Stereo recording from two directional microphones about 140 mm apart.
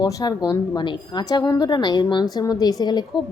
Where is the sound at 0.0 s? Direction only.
25° left (ahead or behind).